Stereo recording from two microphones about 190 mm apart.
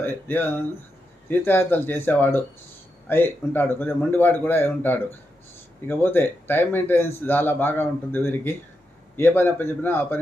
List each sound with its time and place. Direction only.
0.0 s speech: 10° left (ahead or behind)